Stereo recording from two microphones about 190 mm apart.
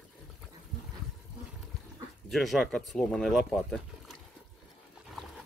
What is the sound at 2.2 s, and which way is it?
Speech, centre (ahead or behind).